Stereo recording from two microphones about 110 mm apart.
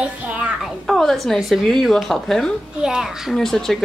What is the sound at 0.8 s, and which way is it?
Speech, centre (ahead or behind).